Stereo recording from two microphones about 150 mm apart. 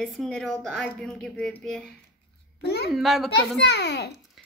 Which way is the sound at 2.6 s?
90° left.